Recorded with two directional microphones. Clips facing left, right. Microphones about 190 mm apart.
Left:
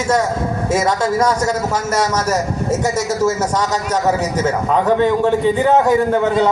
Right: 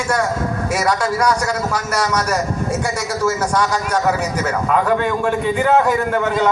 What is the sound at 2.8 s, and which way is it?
Speech, 40° left (ahead or behind).